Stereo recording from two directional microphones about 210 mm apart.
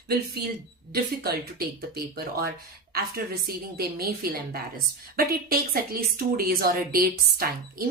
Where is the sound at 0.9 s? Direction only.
45° right (ahead or behind).